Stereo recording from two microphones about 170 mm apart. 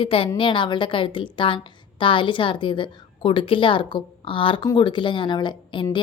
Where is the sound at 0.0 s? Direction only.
35° left (ahead or behind).